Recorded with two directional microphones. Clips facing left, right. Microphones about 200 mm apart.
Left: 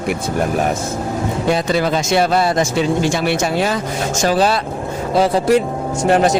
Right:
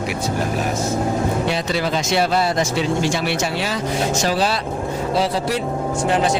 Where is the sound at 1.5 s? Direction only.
50° left (ahead or behind).